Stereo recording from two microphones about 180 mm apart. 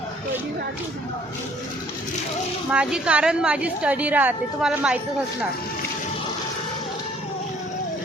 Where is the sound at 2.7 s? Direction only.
5° right (ahead or behind).